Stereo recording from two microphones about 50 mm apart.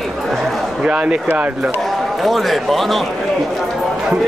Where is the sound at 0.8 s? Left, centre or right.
Right.